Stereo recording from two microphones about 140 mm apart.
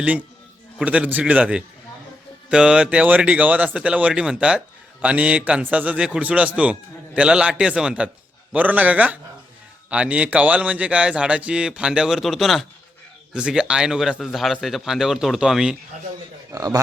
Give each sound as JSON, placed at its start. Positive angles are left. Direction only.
{"t": 0.8, "sound": "speech", "side_deg": -10}
{"t": 16.6, "sound": "speech", "side_deg": -25}